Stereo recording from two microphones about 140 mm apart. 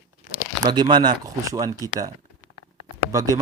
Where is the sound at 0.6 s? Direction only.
30° right (ahead or behind).